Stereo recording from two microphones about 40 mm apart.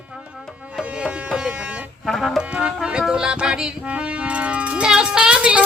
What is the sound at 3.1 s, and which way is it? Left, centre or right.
Music, right.